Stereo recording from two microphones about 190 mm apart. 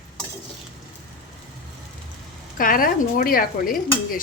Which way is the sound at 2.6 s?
45° left (ahead or behind).